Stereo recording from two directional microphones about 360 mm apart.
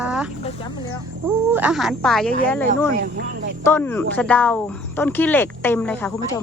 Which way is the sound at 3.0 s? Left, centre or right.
Right.